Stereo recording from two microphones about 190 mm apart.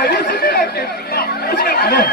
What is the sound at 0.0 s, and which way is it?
Chatter, 60° left (ahead or behind).